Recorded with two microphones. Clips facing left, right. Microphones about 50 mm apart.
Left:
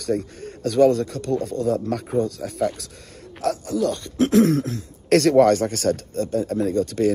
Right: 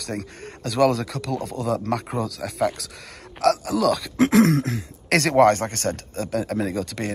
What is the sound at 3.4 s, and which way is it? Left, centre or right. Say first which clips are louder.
Speech: right 3 dB; right.